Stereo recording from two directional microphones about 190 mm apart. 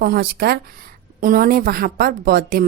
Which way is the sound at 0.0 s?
55° right (ahead or behind).